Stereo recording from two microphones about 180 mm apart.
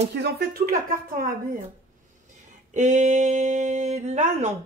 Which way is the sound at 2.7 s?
40° right (ahead or behind).